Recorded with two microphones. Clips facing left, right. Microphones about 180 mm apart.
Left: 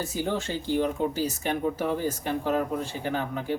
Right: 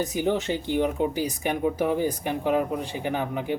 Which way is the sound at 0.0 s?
15° right (ahead or behind).